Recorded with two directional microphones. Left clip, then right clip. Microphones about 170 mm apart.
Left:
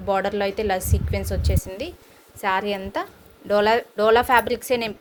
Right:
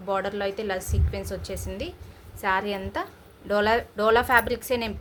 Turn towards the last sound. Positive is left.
turn(degrees=30)  # may be behind; listen again after turning